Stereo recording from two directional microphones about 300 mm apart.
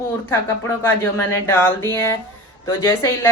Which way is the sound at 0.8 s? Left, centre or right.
Centre.